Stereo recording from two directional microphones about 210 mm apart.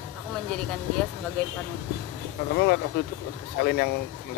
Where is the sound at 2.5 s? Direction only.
50° left (ahead or behind).